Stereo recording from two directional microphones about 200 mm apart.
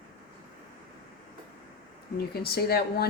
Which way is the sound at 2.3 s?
50° left (ahead or behind).